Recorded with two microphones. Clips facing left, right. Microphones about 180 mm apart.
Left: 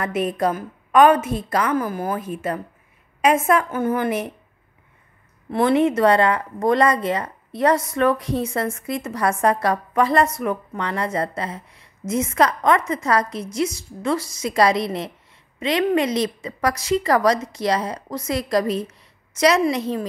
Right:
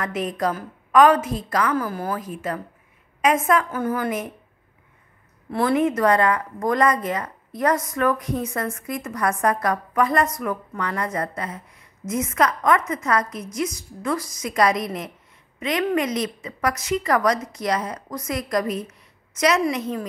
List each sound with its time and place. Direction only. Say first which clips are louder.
0.0 s a woman's voice: left 3 dB; 25° left (ahead or behind)
5.5 s a woman's voice: left 3 dB; 25° left (ahead or behind)